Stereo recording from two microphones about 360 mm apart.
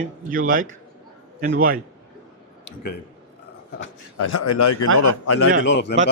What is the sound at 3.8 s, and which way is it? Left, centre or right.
A man's voice, left.